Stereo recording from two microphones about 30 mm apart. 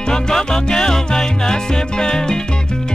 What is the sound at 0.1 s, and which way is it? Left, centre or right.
Music, left.